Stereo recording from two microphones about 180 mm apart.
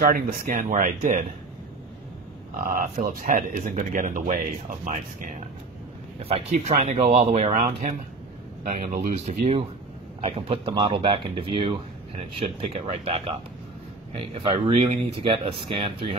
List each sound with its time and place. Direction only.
0.0 s speech: 50° right (ahead or behind)
2.6 s speech: 50° right (ahead or behind)
6.2 s speech: 35° right (ahead or behind)
8.6 s speech: 50° right (ahead or behind); by 16.2 s 30° right (ahead or behind)